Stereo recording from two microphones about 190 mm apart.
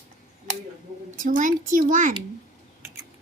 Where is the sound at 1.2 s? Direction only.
45° right (ahead or behind).